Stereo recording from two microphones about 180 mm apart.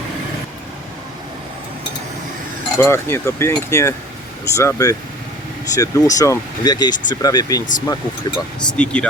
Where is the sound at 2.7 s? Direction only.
15° left (ahead or behind).